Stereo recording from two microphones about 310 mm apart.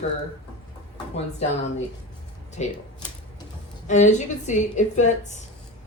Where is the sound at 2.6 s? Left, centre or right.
Left.